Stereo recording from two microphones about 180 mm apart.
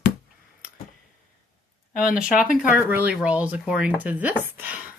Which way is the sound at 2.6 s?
10° right (ahead or behind).